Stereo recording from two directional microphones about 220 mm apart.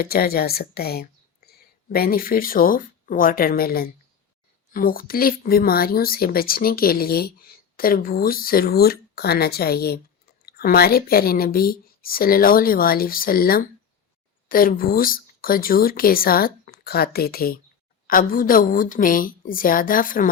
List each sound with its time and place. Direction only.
0.0 s a woman's voice: 45° left (ahead or behind)